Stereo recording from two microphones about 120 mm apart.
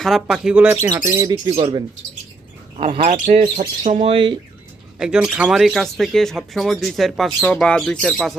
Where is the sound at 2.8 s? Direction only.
65° right (ahead or behind).